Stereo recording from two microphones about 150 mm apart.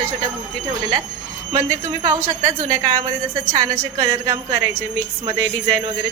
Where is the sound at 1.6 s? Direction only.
20° right (ahead or behind).